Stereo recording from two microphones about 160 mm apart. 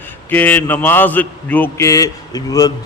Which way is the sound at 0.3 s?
10° left (ahead or behind).